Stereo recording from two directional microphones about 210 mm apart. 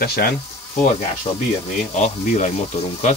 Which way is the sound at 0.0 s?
45° left (ahead or behind).